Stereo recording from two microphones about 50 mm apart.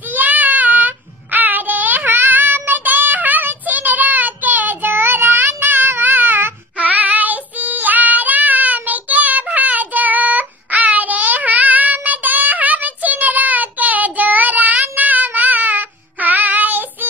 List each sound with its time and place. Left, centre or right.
0.1 s child singing: right
6.8 s child singing: right